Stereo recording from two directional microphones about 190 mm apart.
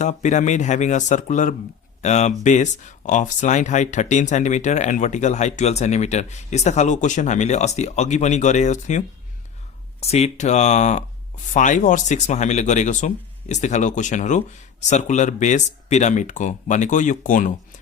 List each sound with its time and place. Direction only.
0.0 s speech: 40° left (ahead or behind)